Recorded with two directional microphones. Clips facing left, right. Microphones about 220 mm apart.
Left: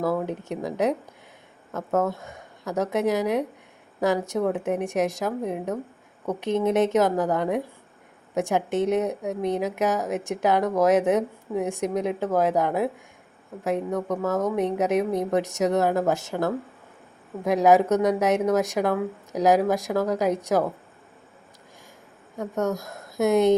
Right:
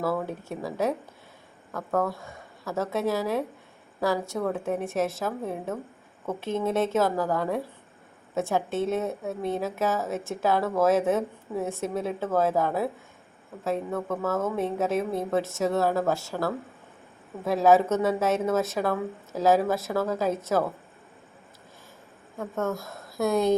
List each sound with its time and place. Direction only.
0.0 s a woman's voice: 15° left (ahead or behind)
22.4 s speech: 15° left (ahead or behind)